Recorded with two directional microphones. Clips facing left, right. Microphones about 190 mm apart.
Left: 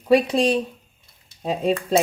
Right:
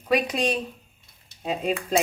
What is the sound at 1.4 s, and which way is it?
Dishes, 35° left (ahead or behind).